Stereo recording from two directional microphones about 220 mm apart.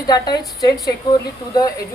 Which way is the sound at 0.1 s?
15° left (ahead or behind).